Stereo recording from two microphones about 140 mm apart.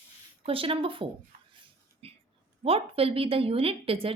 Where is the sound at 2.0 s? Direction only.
45° right (ahead or behind).